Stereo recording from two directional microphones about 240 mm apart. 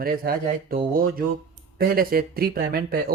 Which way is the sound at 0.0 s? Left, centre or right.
Right.